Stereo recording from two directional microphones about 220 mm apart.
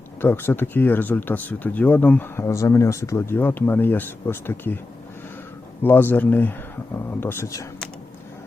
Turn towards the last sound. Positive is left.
turn(degrees=15)  # may be behind; listen again after turning